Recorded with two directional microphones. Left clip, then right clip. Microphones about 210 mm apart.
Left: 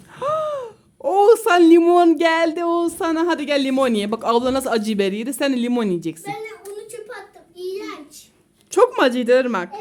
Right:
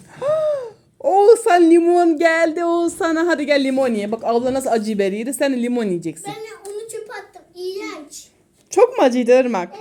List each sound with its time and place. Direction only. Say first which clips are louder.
0.2 s a sound: right 3 dB; centre (ahead or behind)
1.7 s speech: left 1 dB; 20° left (ahead or behind)
2.3 s speech: right 1 dB; 5° left (ahead or behind)
3.8 s speech: even; 15° left (ahead or behind)
6.8 s a sound: right 3 dB; 10° right (ahead or behind)
8.7 s speech: right 2 dB; 5° left (ahead or behind)